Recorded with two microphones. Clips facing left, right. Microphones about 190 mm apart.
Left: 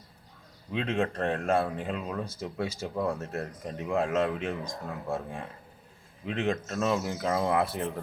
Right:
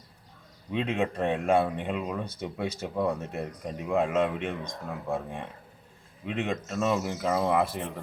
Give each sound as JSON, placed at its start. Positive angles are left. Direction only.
{"t": 0.7, "sound": "speech", "side_deg": 0}